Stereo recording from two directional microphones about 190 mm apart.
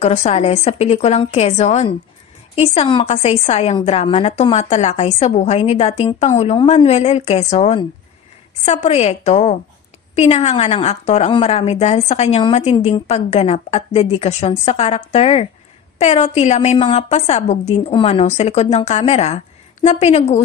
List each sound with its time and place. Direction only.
0.0 s a woman's voice: 35° left (ahead or behind)